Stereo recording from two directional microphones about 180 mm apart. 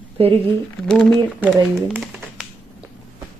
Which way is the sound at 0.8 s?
5° left (ahead or behind).